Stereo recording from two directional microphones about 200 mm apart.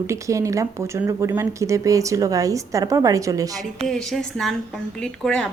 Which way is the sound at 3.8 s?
Centre (ahead or behind).